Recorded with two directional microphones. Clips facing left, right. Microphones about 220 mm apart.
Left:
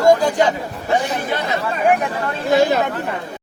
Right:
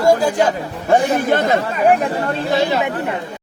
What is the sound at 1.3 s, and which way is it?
Speech, 50° right (ahead or behind).